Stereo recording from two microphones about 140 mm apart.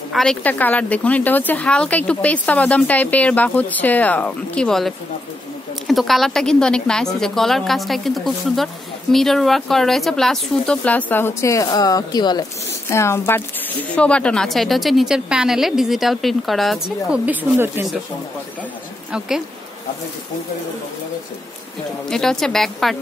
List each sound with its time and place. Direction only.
0.1 s a woman's voice: 5° left (ahead or behind); by 12.4 s 30° left (ahead or behind)
12.9 s a woman's voice: 20° left (ahead or behind); by 17.8 s 15° right (ahead or behind)
19.1 s a woman's voice: 5° right (ahead or behind)
22.1 s a woman's voice: 5° left (ahead or behind)